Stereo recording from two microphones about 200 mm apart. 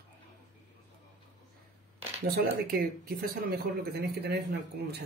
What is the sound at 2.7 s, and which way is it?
Speech, 50° right (ahead or behind).